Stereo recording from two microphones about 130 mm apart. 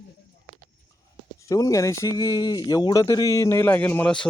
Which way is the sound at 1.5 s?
25° left (ahead or behind).